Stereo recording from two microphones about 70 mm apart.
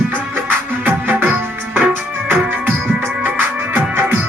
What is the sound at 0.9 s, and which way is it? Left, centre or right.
Music, right.